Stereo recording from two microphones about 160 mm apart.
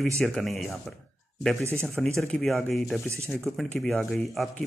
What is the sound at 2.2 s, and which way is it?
Speech, centre (ahead or behind).